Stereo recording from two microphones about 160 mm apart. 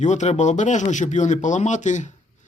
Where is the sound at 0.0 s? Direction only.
50° left (ahead or behind).